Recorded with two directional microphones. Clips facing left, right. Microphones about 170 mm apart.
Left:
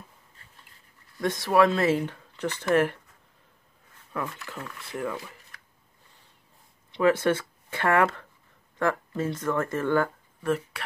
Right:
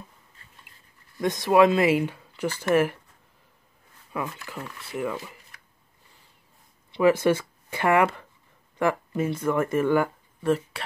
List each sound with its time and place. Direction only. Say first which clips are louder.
1.2 s speech: right 3 dB; 15° right (ahead or behind)
4.1 s speech: right 1 dB; 10° right (ahead or behind)
6.9 s speech: right 2 dB; 10° right (ahead or behind)
10.4 s speech: right 3 dB; 25° right (ahead or behind)